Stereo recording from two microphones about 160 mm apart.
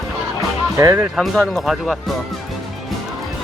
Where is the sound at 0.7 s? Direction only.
20° right (ahead or behind).